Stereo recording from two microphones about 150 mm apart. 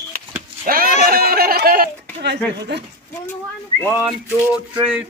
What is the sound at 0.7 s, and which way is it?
Speech, 75° right (ahead or behind).